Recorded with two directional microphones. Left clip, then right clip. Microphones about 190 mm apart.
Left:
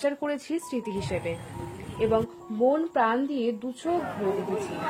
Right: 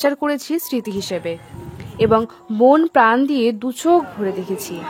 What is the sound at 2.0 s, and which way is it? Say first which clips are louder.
Speech: right 10 dB; 40° right (ahead or behind).